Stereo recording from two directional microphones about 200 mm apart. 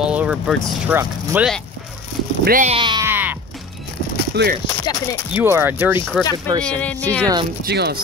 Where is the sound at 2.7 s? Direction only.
25° right (ahead or behind).